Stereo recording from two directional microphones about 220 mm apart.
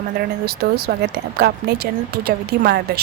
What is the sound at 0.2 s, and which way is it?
Speech, 45° right (ahead or behind).